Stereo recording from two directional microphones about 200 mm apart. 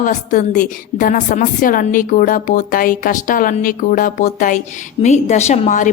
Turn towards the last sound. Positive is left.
turn(degrees=40)  # may be behind; listen again after turning